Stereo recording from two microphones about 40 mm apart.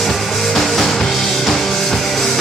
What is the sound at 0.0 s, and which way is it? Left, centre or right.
Music, centre.